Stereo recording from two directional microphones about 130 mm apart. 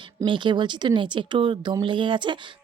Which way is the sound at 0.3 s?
35° right (ahead or behind).